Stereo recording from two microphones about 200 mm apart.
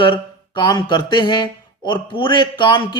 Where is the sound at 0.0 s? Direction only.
25° left (ahead or behind).